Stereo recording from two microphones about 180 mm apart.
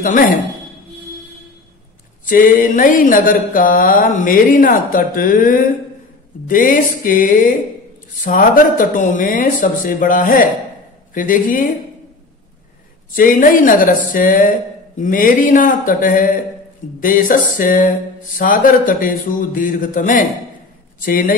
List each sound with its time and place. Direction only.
2.2 s mantra: 50° left (ahead or behind)
13.1 s mantra: 50° left (ahead or behind)